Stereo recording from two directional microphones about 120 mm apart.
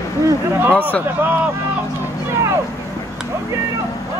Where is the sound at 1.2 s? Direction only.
15° right (ahead or behind).